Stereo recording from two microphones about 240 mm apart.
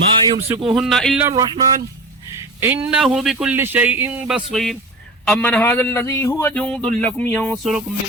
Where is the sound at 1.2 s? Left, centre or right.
Centre.